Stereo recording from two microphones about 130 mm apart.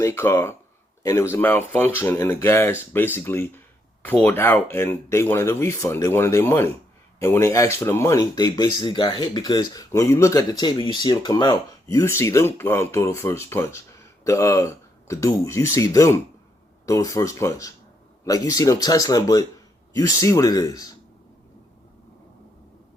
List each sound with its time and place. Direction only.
0.0 s speech: 20° left (ahead or behind)